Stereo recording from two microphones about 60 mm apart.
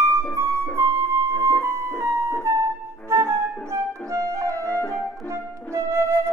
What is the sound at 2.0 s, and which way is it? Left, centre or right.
Music, right.